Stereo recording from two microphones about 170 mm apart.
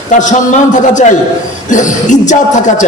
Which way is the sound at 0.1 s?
45° left (ahead or behind).